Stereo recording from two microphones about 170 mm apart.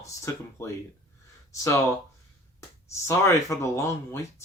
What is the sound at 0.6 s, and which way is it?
Speech, 15° left (ahead or behind).